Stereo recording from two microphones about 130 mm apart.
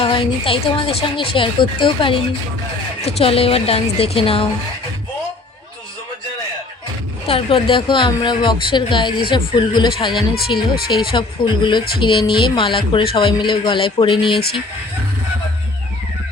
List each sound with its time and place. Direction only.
0.0 s speech: 40° left (ahead or behind)
3.0 s a woman's voice: 50° left (ahead or behind)
7.3 s speech: 45° left (ahead or behind)